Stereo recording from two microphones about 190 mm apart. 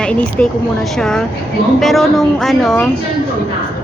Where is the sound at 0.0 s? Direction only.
5° left (ahead or behind).